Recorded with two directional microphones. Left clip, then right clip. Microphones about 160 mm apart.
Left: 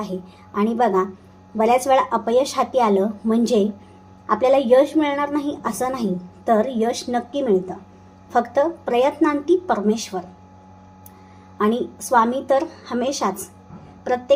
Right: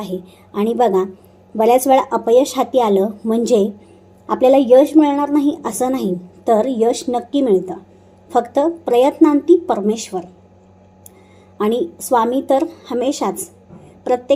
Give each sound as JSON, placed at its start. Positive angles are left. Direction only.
{"t": 0.5, "sound": "a woman's voice", "side_deg": -20}
{"t": 11.5, "sound": "a woman's voice", "side_deg": -20}